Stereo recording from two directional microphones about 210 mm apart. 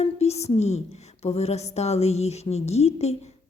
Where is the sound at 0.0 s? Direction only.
30° left (ahead or behind).